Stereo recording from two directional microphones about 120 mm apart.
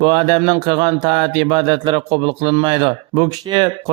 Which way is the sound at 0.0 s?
40° right (ahead or behind).